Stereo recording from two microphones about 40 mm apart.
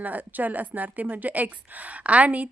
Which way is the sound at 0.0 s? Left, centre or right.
Right.